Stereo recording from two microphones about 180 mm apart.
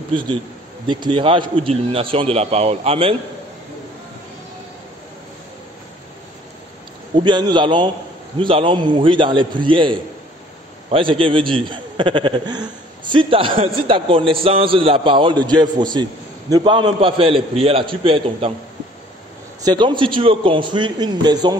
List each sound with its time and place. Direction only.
0.8 s a man's voice: 25° right (ahead or behind)
7.2 s a man's voice: 25° right (ahead or behind)
19.6 s a man's voice: 25° right (ahead or behind)